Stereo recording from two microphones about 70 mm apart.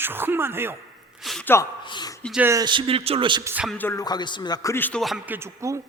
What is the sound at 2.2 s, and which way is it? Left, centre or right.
Speech, centre.